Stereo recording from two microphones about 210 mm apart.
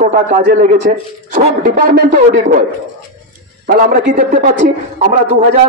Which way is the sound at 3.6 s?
40° right (ahead or behind).